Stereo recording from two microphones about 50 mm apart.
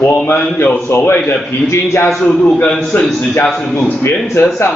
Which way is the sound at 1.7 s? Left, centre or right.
Left.